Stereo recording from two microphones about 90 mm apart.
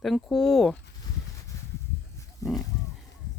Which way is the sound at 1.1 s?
50° left (ahead or behind).